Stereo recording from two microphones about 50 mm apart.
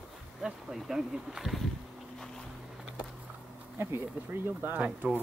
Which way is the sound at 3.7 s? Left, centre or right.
Right.